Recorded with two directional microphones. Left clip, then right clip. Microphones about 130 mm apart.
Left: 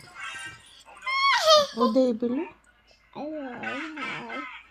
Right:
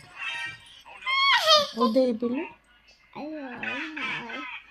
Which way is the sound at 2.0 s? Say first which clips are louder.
Left 1 dB; 5° right (ahead or behind).